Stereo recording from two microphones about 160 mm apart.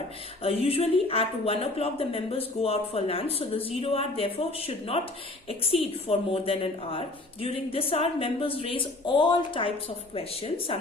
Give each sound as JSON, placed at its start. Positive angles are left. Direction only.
{"t": 0.4, "sound": "speech", "side_deg": 40}